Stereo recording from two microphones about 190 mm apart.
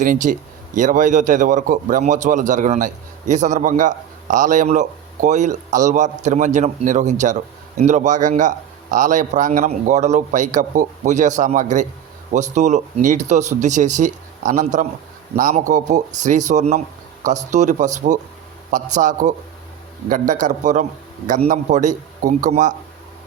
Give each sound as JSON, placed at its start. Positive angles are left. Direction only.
{"t": 0.0, "sound": "a man's voice", "side_deg": -45}